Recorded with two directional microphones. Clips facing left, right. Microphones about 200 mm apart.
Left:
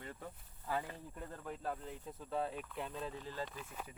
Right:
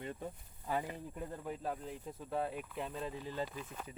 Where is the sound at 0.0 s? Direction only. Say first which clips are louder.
Right 6 dB; 20° right (ahead or behind).